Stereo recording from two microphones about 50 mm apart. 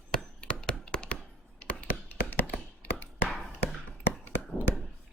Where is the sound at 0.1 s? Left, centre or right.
Centre; by 2.4 s left.